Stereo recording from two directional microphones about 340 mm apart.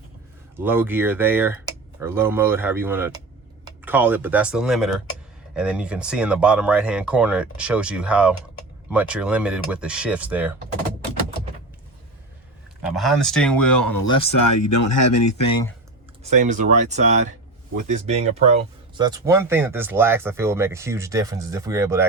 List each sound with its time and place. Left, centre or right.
0.5 s speech: centre
12.8 s speech: centre
14.3 s speech: left
16.3 s speech: right